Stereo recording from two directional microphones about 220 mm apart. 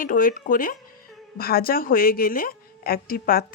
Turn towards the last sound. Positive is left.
turn(degrees=40)  # may be behind; listen again after turning